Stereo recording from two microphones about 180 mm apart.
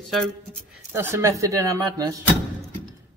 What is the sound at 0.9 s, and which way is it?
Speech, 15° right (ahead or behind).